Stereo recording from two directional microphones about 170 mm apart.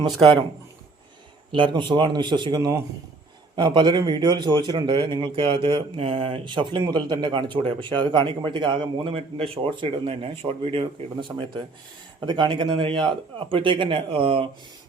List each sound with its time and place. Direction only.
1.5 s speech: 30° right (ahead or behind)